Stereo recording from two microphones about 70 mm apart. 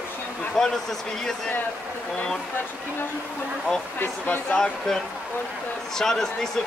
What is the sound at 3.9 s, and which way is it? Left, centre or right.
Speech, left.